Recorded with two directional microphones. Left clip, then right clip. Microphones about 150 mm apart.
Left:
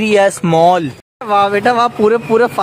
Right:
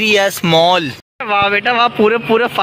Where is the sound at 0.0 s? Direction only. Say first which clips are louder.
Left 1 dB; 15° left (ahead or behind).